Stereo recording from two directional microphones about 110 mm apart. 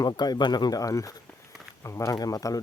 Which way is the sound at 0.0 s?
40° left (ahead or behind).